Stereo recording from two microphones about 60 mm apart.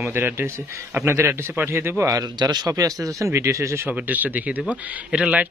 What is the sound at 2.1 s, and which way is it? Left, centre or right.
A man's voice, right.